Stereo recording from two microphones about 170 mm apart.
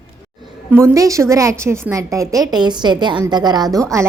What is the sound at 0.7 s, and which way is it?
A woman's voice, 15° right (ahead or behind).